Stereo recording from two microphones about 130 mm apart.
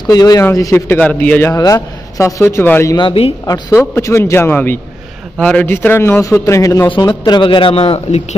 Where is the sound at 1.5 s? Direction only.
25° left (ahead or behind).